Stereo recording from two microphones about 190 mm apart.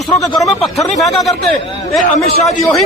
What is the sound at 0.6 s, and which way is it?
Speech, 35° left (ahead or behind).